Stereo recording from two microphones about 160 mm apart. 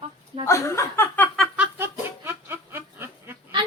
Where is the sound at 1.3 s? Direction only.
5° right (ahead or behind).